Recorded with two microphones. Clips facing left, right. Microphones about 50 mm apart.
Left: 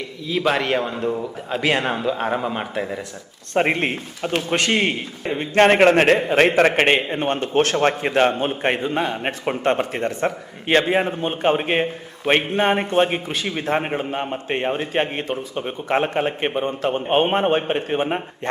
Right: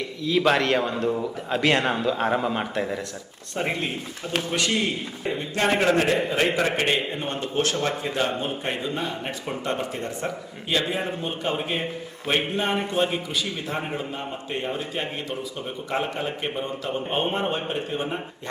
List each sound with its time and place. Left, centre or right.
0.3 s a man's voice: centre
3.5 s a man's voice: left
5.2 s speech: left
5.5 s a man's voice: left